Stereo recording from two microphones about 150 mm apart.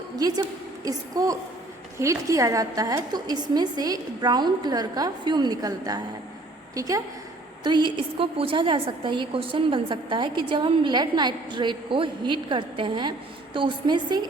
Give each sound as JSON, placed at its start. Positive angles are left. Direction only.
{"t": 0.2, "sound": "a woman's voice", "side_deg": -25}